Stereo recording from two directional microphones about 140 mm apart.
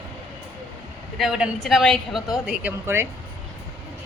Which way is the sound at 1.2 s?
5° right (ahead or behind).